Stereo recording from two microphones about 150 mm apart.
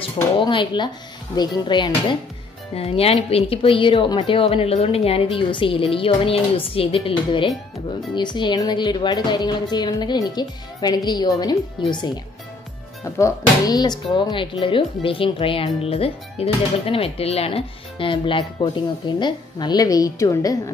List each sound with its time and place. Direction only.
0.4 s speech: 35° left (ahead or behind)
2.7 s speech: 40° left (ahead or behind); by 20.7 s 20° left (ahead or behind)